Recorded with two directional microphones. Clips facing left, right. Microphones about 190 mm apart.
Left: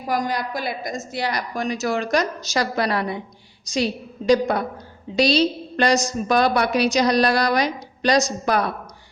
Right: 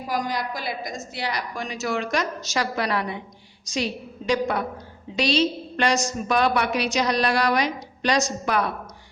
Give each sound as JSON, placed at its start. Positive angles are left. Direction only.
{"t": 0.1, "sound": "a woman's voice", "side_deg": 50}